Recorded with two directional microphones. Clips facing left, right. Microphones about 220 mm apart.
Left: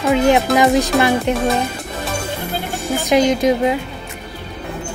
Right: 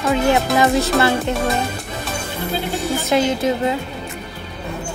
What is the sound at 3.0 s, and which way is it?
Speech, 15° left (ahead or behind).